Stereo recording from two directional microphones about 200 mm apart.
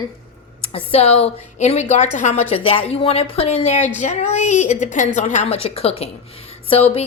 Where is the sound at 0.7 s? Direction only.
30° left (ahead or behind).